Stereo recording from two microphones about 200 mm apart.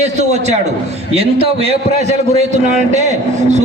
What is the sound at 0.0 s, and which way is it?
A man's voice, 35° right (ahead or behind).